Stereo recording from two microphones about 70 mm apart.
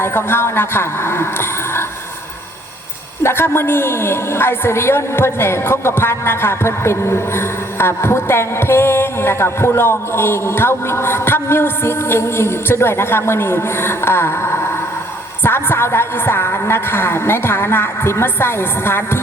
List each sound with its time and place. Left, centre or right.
0.0 s a woman's voice: left
3.2 s a woman's voice: left